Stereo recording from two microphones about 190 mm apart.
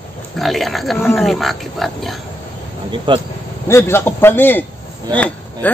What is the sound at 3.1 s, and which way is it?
Speech, 25° right (ahead or behind).